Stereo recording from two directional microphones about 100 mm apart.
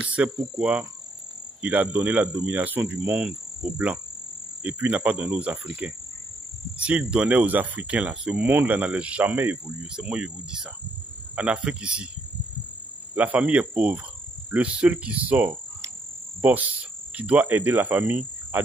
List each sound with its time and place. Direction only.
0.0 s speech: 10° right (ahead or behind)
3.1 s cricket: 10° right (ahead or behind)
4.6 s speech: 15° right (ahead or behind)
13.1 s speech: 15° right (ahead or behind)
16.3 s cricket: 15° right (ahead or behind)